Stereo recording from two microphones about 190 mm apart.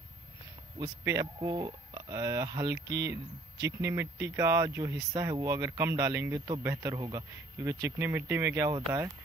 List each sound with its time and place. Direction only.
0.7 s speech: 20° right (ahead or behind)